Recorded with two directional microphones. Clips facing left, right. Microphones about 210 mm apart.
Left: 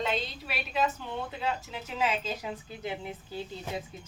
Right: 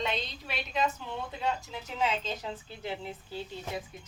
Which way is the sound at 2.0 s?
10° left (ahead or behind).